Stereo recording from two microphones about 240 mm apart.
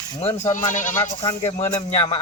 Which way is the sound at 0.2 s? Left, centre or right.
Left.